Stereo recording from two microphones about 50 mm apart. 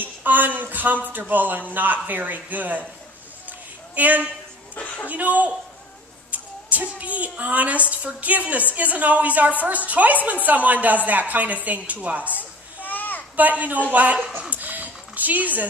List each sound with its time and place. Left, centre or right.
0.0 s a woman's voice: right
3.4 s a sound: right
4.7 s a woman's voice: left
5.0 s a woman's voice: right
12.8 s children playing: left
13.4 s a woman's voice: right
14.5 s a sound: right